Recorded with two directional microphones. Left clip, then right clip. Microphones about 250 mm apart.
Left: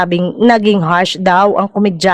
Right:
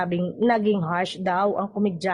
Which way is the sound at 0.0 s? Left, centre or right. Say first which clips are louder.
Left 12 dB; left.